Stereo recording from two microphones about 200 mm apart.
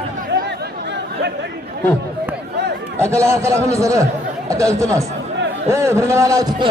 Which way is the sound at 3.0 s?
15° right (ahead or behind).